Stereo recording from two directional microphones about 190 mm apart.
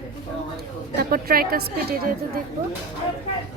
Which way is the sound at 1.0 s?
50° right (ahead or behind).